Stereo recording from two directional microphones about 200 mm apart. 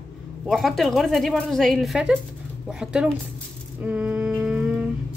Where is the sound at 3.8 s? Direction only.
5° right (ahead or behind).